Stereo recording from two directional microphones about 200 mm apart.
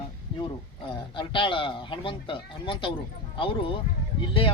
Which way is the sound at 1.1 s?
25° left (ahead or behind).